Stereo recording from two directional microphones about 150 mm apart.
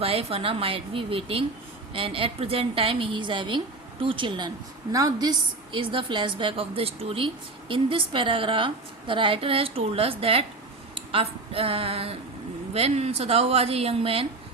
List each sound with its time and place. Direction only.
0.0 s a woman's voice: 40° right (ahead or behind)